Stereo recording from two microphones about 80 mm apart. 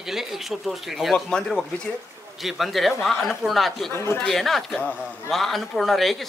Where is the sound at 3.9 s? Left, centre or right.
Left.